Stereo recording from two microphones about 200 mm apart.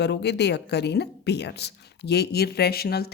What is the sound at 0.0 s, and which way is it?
Speech, 55° left (ahead or behind).